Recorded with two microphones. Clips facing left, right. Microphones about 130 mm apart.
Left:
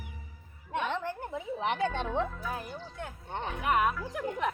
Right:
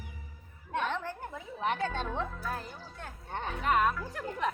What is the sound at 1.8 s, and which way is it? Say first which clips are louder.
Music: left 3 dB; 15° left (ahead or behind).